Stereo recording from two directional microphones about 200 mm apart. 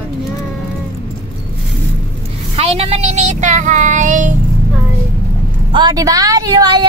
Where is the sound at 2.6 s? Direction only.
30° right (ahead or behind).